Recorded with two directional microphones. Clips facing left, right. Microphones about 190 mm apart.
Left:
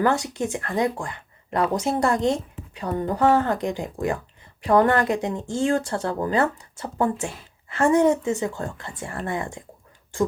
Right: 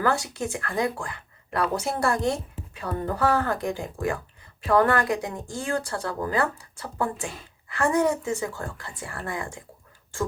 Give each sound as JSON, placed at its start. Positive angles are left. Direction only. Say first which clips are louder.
{"t": 0.0, "sound": "speech", "louder": "left 3 dB", "side_deg": 20}